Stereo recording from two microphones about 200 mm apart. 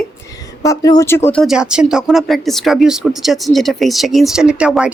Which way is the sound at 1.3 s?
Centre (ahead or behind).